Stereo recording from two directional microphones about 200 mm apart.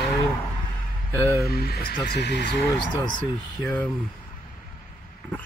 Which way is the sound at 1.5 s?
50° left (ahead or behind).